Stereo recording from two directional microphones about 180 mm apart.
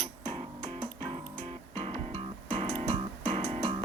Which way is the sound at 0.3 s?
30° right (ahead or behind).